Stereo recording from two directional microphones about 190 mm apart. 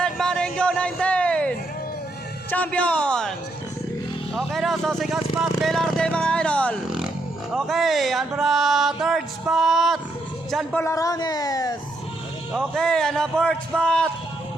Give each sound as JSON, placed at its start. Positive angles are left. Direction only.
{"t": 0.0, "sound": "a sound", "side_deg": 5}
{"t": 2.5, "sound": "a man's voice", "side_deg": 5}
{"t": 4.4, "sound": "a man's voice", "side_deg": 0}
{"t": 12.5, "sound": "speech", "side_deg": 5}